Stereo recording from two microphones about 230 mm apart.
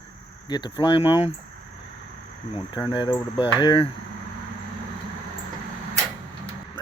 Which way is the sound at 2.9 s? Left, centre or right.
Centre.